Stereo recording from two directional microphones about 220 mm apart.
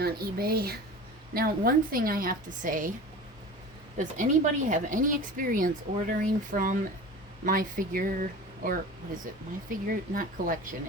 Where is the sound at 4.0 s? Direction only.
35° right (ahead or behind).